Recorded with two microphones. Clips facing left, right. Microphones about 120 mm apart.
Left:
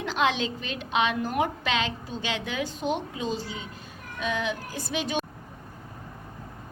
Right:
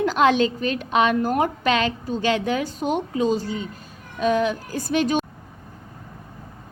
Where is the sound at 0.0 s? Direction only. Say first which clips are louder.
Right 8 dB; 45° right (ahead or behind).